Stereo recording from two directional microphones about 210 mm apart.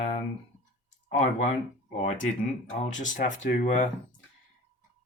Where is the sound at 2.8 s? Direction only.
35° left (ahead or behind).